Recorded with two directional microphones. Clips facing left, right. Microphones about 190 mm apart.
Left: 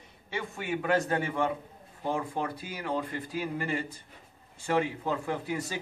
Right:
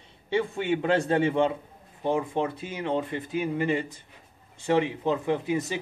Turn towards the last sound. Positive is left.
turn(degrees=-20)  # may be behind; listen again after turning